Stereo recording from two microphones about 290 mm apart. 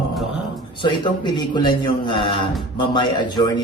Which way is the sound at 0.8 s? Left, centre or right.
Centre.